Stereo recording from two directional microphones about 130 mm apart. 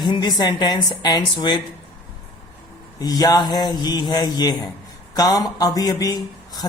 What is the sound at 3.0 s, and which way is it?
Speech, 30° left (ahead or behind).